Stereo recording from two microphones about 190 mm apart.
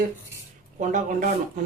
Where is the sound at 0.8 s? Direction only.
40° right (ahead or behind).